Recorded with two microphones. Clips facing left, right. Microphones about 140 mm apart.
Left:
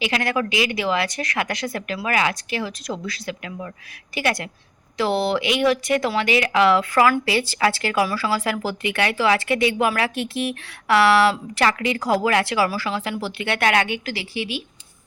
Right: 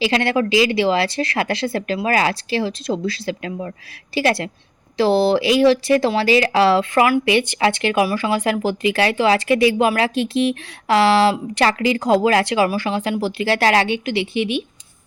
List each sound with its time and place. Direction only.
0.0 s speech: 30° right (ahead or behind)